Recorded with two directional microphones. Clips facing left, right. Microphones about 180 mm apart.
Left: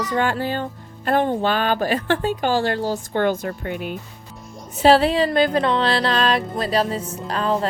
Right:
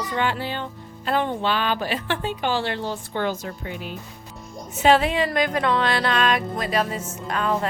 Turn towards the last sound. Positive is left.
turn(degrees=30)  # may be behind; listen again after turning